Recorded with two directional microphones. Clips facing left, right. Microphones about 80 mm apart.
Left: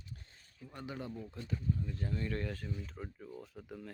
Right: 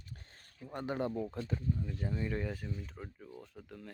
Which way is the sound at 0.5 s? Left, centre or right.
Right.